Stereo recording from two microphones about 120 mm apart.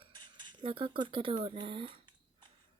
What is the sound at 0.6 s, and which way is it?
Speech, 45° right (ahead or behind).